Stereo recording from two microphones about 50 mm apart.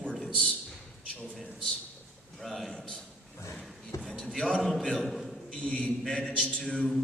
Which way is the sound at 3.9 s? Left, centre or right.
Left.